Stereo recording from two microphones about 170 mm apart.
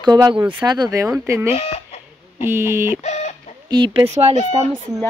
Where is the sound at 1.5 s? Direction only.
35° left (ahead or behind).